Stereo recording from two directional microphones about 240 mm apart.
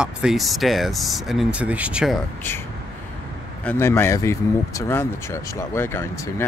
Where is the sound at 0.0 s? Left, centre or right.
Centre.